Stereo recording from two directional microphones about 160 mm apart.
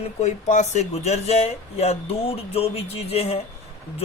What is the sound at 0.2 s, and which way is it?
Speech, 45° left (ahead or behind).